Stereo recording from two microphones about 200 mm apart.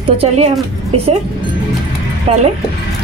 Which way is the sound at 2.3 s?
30° right (ahead or behind).